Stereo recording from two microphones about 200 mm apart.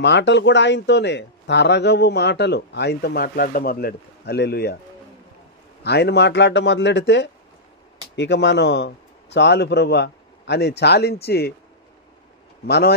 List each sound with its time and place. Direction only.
0.0 s speech: 60° left (ahead or behind)
5.9 s speech: 55° left (ahead or behind)
12.6 s speech: 55° left (ahead or behind)